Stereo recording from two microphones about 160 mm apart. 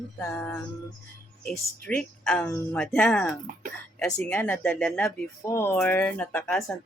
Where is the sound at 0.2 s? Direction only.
10° left (ahead or behind).